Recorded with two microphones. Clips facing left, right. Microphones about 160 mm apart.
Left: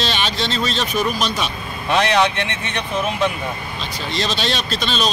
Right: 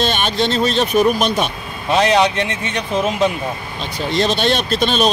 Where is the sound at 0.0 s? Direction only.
50° right (ahead or behind).